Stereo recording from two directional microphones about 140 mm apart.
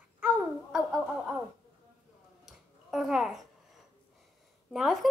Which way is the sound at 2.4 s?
Centre (ahead or behind).